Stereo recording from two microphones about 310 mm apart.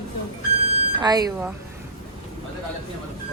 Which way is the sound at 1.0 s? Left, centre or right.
Centre.